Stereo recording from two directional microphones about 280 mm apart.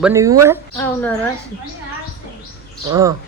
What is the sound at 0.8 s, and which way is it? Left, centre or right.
Speech, centre.